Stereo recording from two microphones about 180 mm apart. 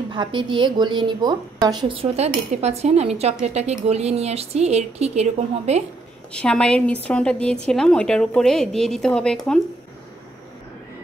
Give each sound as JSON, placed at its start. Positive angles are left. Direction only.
{"t": 0.1, "sound": "a woman's voice", "side_deg": -25}
{"t": 6.3, "sound": "speech", "side_deg": 5}